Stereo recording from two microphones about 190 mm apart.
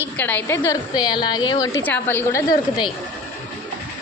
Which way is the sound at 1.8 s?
10° left (ahead or behind).